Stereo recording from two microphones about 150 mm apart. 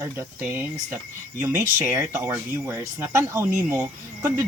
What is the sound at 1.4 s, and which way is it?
Speech, 20° right (ahead or behind).